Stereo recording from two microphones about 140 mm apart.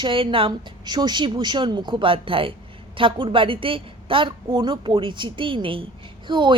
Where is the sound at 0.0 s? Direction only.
40° right (ahead or behind).